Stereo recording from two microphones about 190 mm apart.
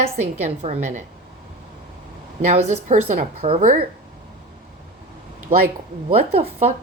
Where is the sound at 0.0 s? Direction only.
35° right (ahead or behind).